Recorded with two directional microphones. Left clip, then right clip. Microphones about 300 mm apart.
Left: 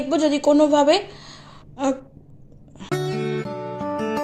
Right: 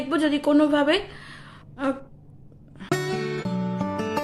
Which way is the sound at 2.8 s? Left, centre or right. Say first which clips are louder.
Left 1 dB; centre.